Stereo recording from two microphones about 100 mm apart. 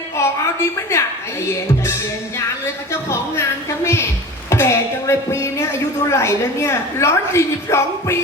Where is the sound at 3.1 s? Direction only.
30° left (ahead or behind).